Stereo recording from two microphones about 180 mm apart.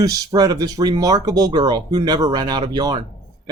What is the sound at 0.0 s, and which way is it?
Speech, 20° right (ahead or behind).